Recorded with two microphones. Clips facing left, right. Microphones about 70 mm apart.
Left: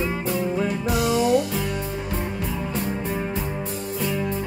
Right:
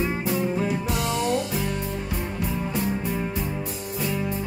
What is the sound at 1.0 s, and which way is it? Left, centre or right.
Music, centre.